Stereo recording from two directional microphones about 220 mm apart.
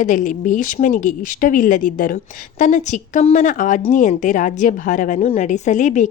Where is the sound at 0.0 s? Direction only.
35° left (ahead or behind).